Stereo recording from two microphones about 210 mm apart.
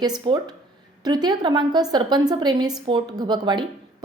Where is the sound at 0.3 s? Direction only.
25° right (ahead or behind).